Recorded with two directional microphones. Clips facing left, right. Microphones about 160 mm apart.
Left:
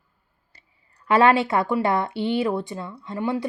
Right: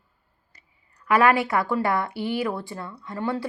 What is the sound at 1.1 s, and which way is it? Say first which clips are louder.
Speech: left 2 dB; 25° left (ahead or behind).